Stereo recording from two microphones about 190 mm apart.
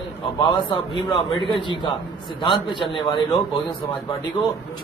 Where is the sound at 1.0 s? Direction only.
25° left (ahead or behind).